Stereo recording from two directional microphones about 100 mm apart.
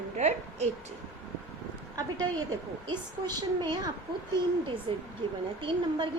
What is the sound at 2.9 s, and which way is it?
A woman's voice, 45° right (ahead or behind).